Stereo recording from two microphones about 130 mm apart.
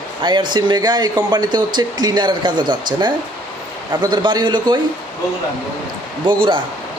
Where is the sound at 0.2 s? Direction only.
35° right (ahead or behind).